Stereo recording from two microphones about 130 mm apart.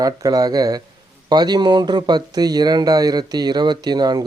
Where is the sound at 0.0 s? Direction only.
30° right (ahead or behind).